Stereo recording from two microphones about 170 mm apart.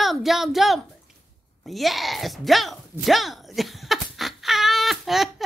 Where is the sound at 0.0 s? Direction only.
Centre (ahead or behind).